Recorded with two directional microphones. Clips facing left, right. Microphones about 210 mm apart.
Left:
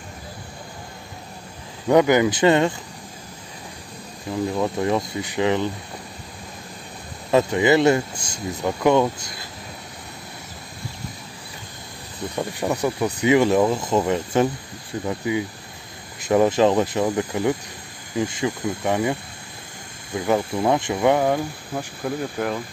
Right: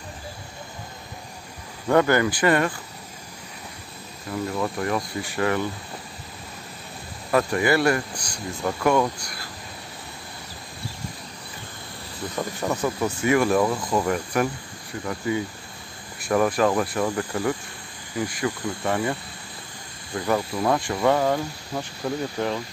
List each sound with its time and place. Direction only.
1.9 s speech: 15° left (ahead or behind)
4.3 s speech: 20° left (ahead or behind)
7.2 s speech: 20° left (ahead or behind)
12.4 s speech: 15° left (ahead or behind)
20.2 s speech: 20° left (ahead or behind)